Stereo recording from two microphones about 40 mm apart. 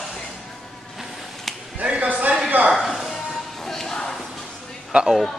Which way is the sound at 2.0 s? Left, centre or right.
Right.